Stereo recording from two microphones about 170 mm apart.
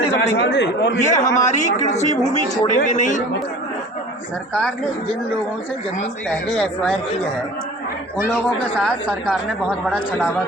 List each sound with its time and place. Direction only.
0.2 s a man's voice: 85° left
0.9 s a woman's voice: 45° left (ahead or behind)
1.2 s a man's voice: 20° left (ahead or behind)
1.5 s a woman's voice: 45° left (ahead or behind)
9.2 s speech: centre (ahead or behind)